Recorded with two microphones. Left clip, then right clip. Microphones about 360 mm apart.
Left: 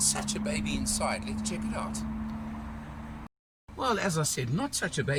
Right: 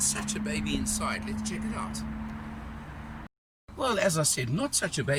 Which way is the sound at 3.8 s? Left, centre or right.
Centre.